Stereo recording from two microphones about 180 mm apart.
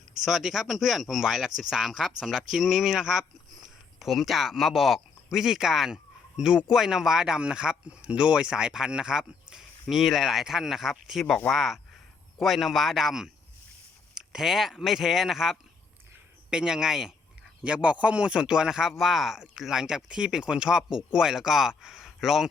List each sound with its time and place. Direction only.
0.3 s speech: centre (ahead or behind)